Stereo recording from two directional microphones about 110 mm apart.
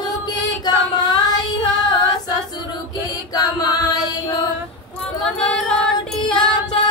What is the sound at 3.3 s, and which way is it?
Music, 35° left (ahead or behind).